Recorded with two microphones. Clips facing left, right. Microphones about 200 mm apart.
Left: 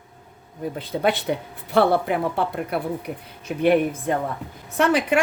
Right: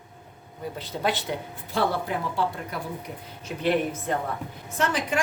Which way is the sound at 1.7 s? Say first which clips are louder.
Left 7 dB; 60° left (ahead or behind).